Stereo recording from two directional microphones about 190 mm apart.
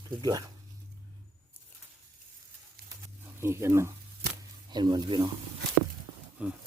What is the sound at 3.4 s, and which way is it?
Speech, 15° right (ahead or behind).